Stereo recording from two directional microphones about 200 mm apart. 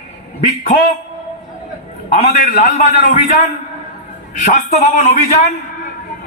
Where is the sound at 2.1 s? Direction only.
45° left (ahead or behind).